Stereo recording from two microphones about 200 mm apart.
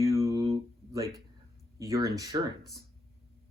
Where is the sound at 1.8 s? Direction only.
15° right (ahead or behind).